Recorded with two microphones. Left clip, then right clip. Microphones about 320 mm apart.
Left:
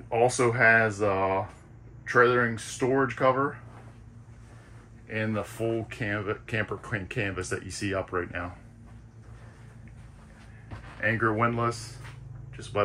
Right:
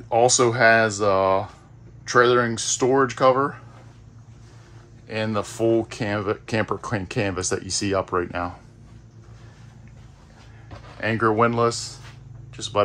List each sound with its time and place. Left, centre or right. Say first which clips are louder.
0.1 s speech: right 6 dB; centre
5.0 s speech: right 5 dB; centre
11.0 s speech: right 6 dB; centre